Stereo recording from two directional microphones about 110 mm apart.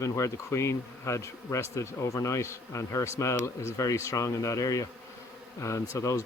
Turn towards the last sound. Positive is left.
turn(degrees=30)  # may be behind; listen again after turning